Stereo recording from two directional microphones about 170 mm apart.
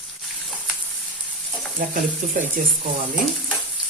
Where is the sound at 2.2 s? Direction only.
50° right (ahead or behind).